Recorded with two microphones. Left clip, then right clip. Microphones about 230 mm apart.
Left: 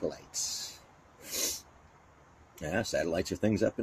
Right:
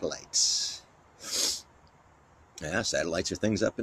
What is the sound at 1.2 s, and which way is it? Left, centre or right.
Sneeze, centre.